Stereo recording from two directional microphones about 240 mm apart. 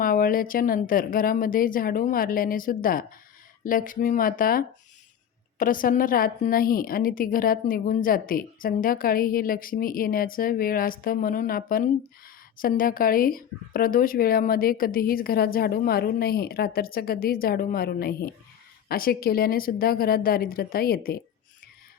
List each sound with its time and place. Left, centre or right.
0.0 s a woman's voice: left